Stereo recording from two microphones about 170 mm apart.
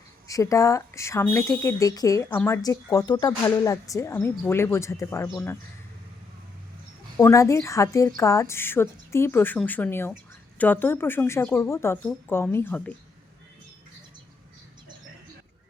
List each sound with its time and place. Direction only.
0.3 s speech: 20° left (ahead or behind)
7.2 s speech: 20° left (ahead or behind)